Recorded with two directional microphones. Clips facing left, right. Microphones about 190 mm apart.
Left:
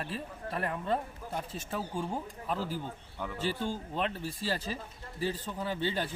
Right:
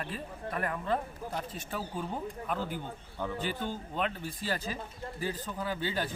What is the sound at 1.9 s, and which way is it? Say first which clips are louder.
Speech: left 2 dB; 30° left (ahead or behind).